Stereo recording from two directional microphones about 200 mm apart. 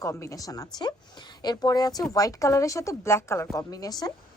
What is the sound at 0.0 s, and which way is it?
A woman's voice, 15° left (ahead or behind).